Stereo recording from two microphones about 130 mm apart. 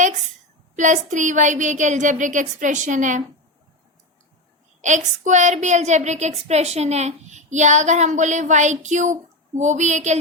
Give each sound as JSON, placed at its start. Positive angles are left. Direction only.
{"t": 0.8, "sound": "a woman's voice", "side_deg": -70}
{"t": 4.8, "sound": "a woman's voice", "side_deg": -70}